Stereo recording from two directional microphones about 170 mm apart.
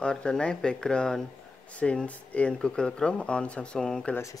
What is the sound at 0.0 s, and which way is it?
Speech, 5° left (ahead or behind).